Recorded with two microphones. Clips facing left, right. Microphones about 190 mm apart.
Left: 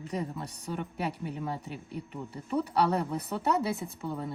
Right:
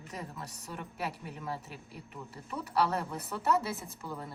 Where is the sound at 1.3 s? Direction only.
Centre (ahead or behind).